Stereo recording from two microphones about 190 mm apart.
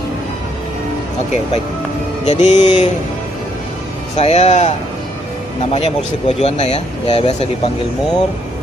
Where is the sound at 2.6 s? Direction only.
25° left (ahead or behind).